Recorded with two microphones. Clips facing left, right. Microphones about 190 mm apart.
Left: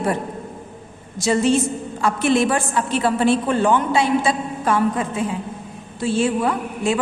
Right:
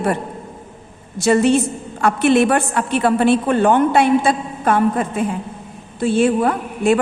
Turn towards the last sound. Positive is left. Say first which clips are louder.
# right 4 dB
turn(degrees=-55)  # may be behind; listen again after turning